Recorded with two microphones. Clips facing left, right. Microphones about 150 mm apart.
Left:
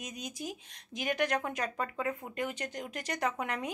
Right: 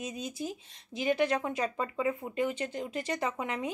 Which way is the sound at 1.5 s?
15° right (ahead or behind).